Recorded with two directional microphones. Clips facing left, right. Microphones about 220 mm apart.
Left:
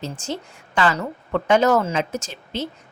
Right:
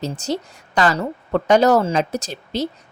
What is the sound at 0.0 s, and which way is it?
Speech, 40° right (ahead or behind).